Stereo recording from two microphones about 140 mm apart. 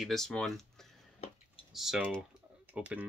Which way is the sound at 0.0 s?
5° left (ahead or behind).